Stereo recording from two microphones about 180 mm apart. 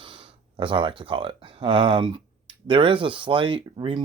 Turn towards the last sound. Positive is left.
turn(degrees=-30)  # may be behind; listen again after turning